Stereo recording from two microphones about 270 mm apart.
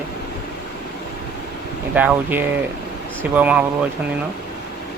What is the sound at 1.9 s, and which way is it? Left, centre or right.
Speech, centre.